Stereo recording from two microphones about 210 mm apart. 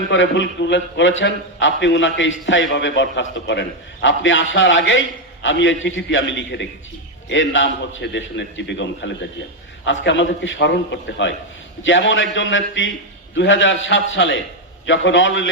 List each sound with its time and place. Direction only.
0.1 s a man's voice: 60° left (ahead or behind)